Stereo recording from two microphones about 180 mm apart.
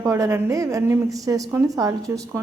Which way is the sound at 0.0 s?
15° right (ahead or behind).